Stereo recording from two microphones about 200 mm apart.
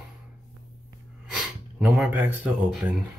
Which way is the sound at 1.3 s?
Centre (ahead or behind).